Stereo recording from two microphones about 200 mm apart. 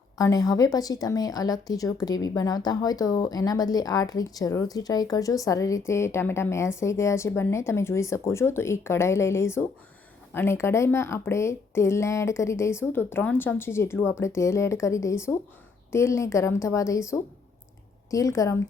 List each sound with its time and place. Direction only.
0.2 s speech: 15° left (ahead or behind)